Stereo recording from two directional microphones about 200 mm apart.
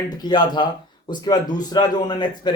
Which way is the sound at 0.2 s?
20° left (ahead or behind).